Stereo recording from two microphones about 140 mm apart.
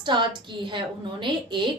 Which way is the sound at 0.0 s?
35° right (ahead or behind).